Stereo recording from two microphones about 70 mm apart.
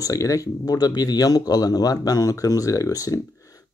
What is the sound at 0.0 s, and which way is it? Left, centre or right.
Speech, left.